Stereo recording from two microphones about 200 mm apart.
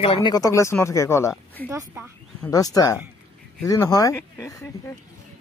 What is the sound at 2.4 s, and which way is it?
Speech, 15° left (ahead or behind).